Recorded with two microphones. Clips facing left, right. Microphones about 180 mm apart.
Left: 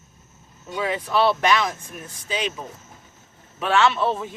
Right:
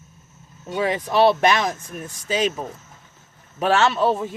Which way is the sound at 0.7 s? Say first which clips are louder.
Right 3 dB; 40° right (ahead or behind).